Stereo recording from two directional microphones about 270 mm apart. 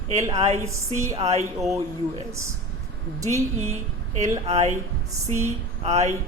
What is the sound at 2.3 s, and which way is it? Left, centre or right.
Speech, centre.